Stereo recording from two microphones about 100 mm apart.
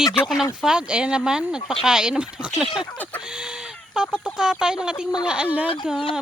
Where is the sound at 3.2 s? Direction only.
10° right (ahead or behind).